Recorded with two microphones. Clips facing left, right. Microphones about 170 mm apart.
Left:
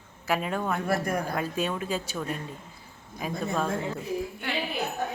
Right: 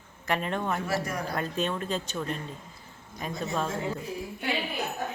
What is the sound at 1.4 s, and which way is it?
A woman's voice, 10° left (ahead or behind).